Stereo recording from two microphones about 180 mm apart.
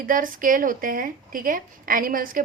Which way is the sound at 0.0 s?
50° right (ahead or behind).